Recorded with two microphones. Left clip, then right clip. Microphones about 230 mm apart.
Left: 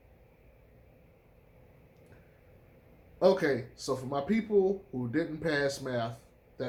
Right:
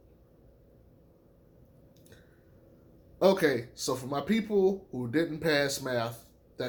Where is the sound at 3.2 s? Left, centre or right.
Right.